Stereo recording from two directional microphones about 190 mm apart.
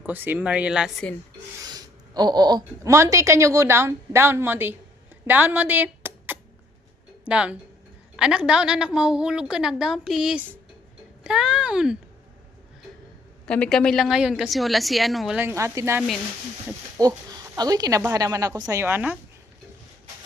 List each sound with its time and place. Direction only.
0.0 s a woman's voice: 10° right (ahead or behind)
1.6 s a woman's voice: 20° right (ahead or behind)
5.2 s a sound: 10° right (ahead or behind)
7.3 s a woman's voice: 5° right (ahead or behind)
13.4 s a woman's voice: 5° left (ahead or behind)
15.4 s a woman's voice: 15° right (ahead or behind)